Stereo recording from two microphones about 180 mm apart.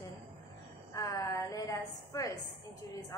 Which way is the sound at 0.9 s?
15° left (ahead or behind).